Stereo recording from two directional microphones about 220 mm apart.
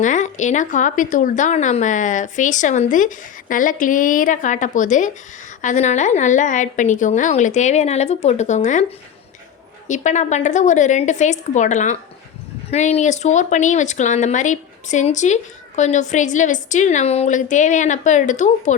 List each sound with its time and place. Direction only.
0.0 s speech: 35° left (ahead or behind)
9.8 s speech: 35° left (ahead or behind)